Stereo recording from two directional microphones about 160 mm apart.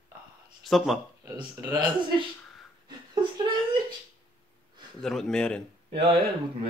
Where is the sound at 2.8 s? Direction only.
30° right (ahead or behind).